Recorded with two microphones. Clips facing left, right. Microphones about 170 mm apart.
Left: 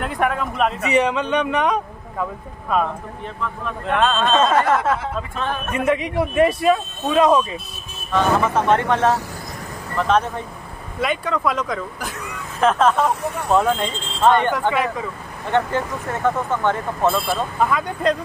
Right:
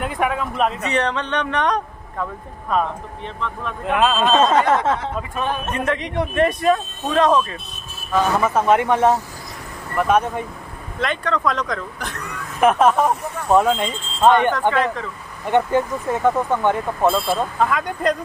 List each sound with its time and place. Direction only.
0.0 s speech: 5° right (ahead or behind)
3.8 s speech: 5° right (ahead or behind)
5.3 s speech: 15° right (ahead or behind)
5.7 s speech: 10° left (ahead or behind)
8.1 s speech: 5° right (ahead or behind)
11.0 s speech: 10° left (ahead or behind)
12.5 s speech: 15° right (ahead or behind)
14.7 s speech: 10° left (ahead or behind)
15.5 s speech: 15° right (ahead or behind)